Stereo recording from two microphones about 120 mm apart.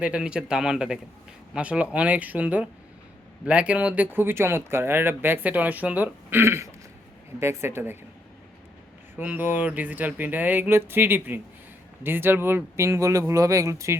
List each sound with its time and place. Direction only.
0.0 s speech: 10° right (ahead or behind)
9.1 s speech: 15° right (ahead or behind)